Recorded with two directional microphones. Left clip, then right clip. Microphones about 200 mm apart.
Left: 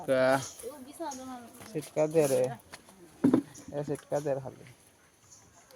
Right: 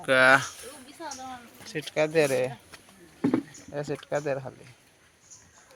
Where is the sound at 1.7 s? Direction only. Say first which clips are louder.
Right 3 dB; 5° left (ahead or behind).